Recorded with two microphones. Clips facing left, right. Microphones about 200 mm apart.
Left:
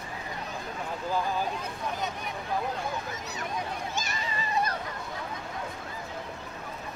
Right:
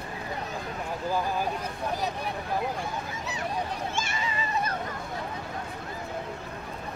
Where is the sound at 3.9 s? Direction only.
40° left (ahead or behind).